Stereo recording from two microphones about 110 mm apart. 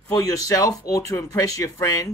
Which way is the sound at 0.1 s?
30° left (ahead or behind).